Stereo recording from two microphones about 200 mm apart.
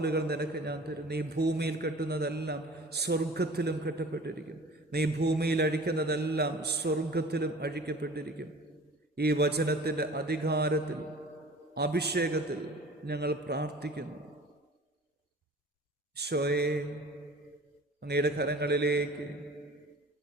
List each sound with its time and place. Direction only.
0.0 s a man's voice: 55° right (ahead or behind)
16.1 s a man's voice: 55° right (ahead or behind)
18.0 s a man's voice: 55° right (ahead or behind)